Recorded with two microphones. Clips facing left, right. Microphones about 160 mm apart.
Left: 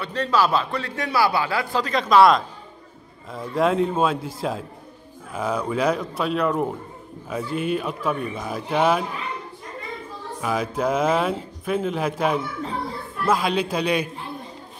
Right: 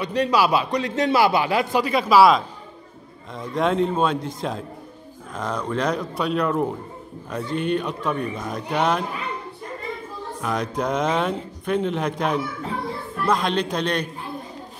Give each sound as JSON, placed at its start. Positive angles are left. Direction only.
{"t": 0.0, "sound": "a man's voice", "side_deg": -15}
{"t": 10.4, "sound": "speech", "side_deg": 5}